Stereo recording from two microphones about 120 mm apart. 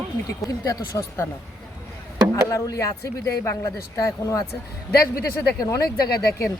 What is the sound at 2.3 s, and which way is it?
A man's voice, 25° left (ahead or behind).